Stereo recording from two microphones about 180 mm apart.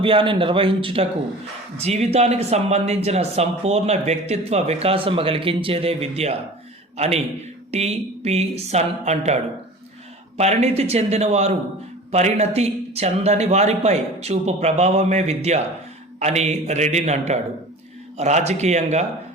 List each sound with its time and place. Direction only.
0.0 s a man's voice: 30° right (ahead or behind)